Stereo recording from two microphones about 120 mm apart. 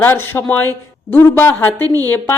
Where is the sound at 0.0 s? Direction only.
20° left (ahead or behind).